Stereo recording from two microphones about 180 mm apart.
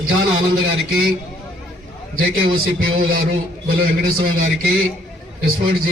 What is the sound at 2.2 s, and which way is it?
A man's voice, 55° right (ahead or behind).